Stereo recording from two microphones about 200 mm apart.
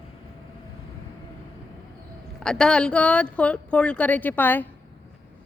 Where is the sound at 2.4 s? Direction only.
5° left (ahead or behind).